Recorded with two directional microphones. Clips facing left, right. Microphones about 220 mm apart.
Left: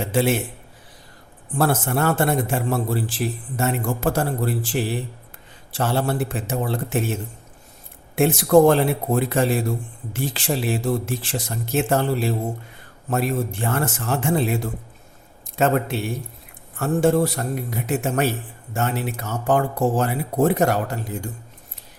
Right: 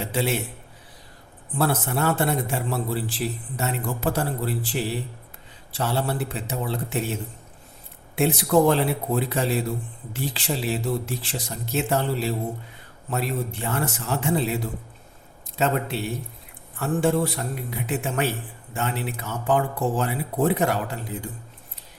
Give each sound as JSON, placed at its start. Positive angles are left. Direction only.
{"t": 0.0, "sound": "a man's voice", "side_deg": 50}
{"t": 1.5, "sound": "a man's voice", "side_deg": 50}